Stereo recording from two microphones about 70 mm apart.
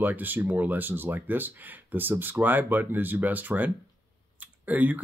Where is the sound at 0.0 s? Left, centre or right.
Right.